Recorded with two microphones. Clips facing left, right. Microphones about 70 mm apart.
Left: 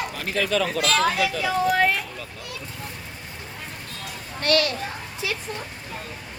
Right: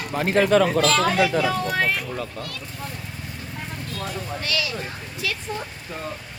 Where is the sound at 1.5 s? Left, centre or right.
Centre.